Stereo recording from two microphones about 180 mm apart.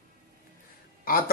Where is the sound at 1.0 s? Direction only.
55° left (ahead or behind).